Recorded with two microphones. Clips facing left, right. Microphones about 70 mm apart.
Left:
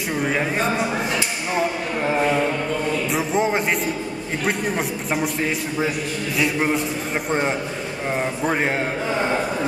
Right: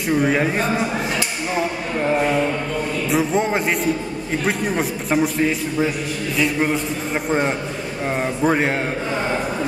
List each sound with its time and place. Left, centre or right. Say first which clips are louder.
0.1 s a man's voice: right 5 dB; centre